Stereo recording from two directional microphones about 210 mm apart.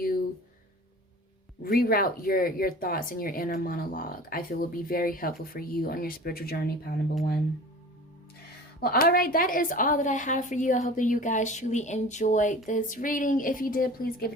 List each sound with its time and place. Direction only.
1.8 s speech: 45° left (ahead or behind)
8.8 s a woman's voice: 45° left (ahead or behind)